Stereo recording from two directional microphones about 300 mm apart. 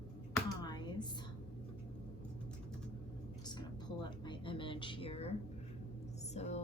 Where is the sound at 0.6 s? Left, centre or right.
Centre.